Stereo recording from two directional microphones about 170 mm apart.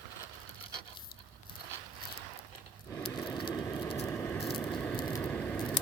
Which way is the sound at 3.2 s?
25° left (ahead or behind).